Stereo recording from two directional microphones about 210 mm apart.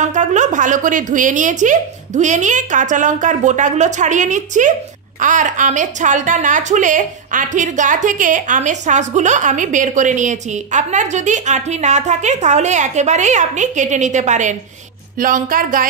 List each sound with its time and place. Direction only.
0.0 s a woman's voice: 35° right (ahead or behind)